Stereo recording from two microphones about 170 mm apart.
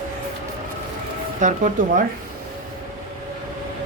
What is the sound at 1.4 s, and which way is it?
Speech, 45° right (ahead or behind).